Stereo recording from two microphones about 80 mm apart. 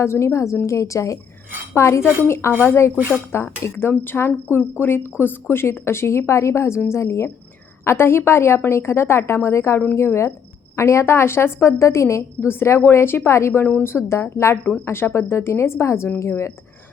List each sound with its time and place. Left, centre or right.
0.0 s a woman's voice: left